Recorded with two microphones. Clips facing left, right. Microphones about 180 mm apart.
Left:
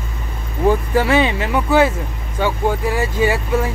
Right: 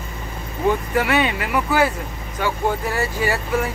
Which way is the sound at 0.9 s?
30° left (ahead or behind).